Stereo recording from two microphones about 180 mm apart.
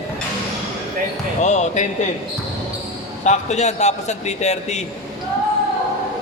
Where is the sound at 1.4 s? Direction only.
40° left (ahead or behind).